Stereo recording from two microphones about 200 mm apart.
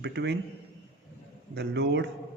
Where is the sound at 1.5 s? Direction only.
60° right (ahead or behind).